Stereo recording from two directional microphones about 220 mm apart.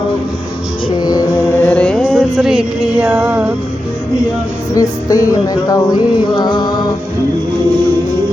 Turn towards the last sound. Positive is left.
turn(degrees=20)  # may be behind; listen again after turning